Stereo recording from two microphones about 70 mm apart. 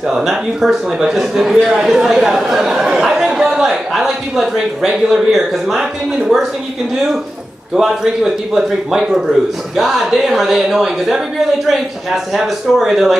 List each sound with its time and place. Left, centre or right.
0.1 s a man's voice: centre
7.7 s a man's voice: centre